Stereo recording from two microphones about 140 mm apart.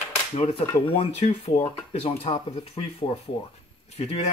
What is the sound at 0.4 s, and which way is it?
Speech, 45° left (ahead or behind).